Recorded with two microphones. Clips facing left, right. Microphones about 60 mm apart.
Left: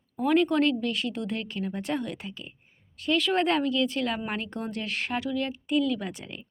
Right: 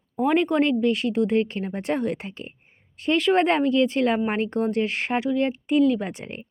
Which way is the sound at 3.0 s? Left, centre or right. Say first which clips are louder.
Right 5 dB; right.